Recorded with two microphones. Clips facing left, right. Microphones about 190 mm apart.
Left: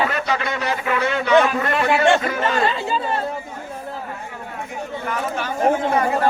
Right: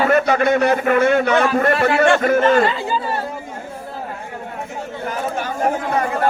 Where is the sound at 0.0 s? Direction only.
50° right (ahead or behind).